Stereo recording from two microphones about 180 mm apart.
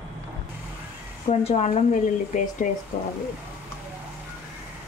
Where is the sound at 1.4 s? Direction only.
40° left (ahead or behind).